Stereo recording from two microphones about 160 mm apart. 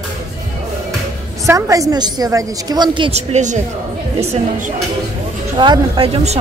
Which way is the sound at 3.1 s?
45° right (ahead or behind).